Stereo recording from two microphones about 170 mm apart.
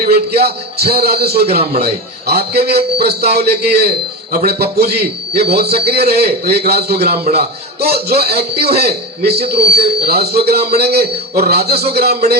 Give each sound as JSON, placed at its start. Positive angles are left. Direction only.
{"t": 0.0, "sound": "a man's voice", "side_deg": -70}